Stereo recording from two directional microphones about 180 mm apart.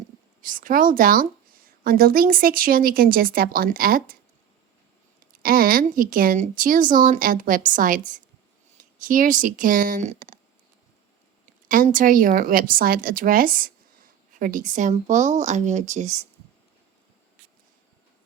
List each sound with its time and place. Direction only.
0.4 s a woman's voice: 50° right (ahead or behind)
5.3 s a woman's voice: 55° right (ahead or behind)
11.7 s a woman's voice: 50° right (ahead or behind)